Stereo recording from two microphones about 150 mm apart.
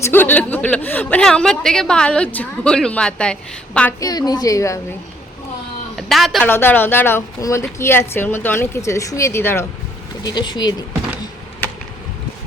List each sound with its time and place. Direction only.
0.0 s a woman's voice: 15° left (ahead or behind)
4.3 s speech: 25° left (ahead or behind)
6.0 s speech: centre (ahead or behind)
6.4 s a woman's voice: 15° left (ahead or behind)
10.2 s speech: 30° left (ahead or behind)